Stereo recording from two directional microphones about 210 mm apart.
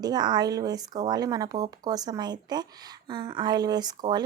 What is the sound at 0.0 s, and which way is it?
Speech, 20° right (ahead or behind).